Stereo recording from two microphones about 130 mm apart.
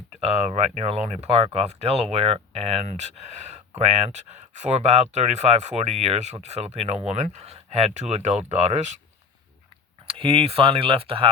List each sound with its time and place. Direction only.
0.2 s speech: 55° right (ahead or behind)
10.1 s speech: 45° right (ahead or behind)